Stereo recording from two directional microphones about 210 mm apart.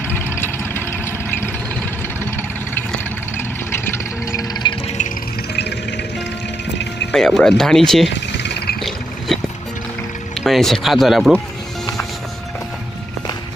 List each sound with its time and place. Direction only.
0.1 s vehicle: 10° left (ahead or behind)
4.3 s a sound: 15° left (ahead or behind)
5.5 s music: 55° left (ahead or behind)
7.1 s speech: centre (ahead or behind)
8.1 s a sound: 55° left (ahead or behind)
9.3 s music: centre (ahead or behind)
10.3 s speech: centre (ahead or behind)